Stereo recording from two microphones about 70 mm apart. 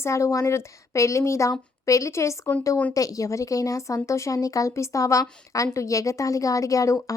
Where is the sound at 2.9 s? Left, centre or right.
Left.